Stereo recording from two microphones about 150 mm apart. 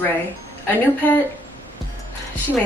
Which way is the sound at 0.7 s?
10° left (ahead or behind).